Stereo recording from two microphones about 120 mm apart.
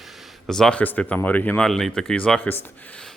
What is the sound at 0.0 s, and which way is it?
Speech, 5° left (ahead or behind).